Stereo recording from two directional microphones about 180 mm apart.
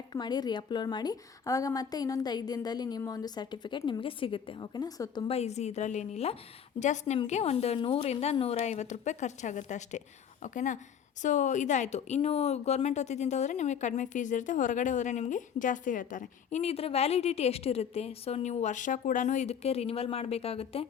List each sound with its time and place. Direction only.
0.1 s a woman's voice: 25° left (ahead or behind)
5.3 s a woman's voice: 35° left (ahead or behind)